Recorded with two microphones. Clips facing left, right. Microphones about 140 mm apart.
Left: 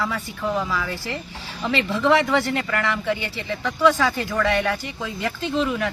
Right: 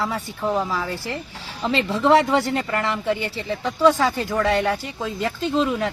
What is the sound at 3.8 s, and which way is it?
Speech, 25° right (ahead or behind).